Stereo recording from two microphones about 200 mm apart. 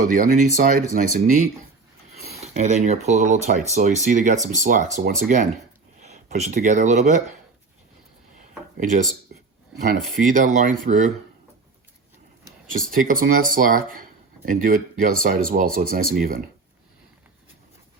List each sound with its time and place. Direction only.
0.0 s speech: 40° right (ahead or behind)
10.2 s speech: 40° right (ahead or behind)
12.9 s speech: 45° right (ahead or behind)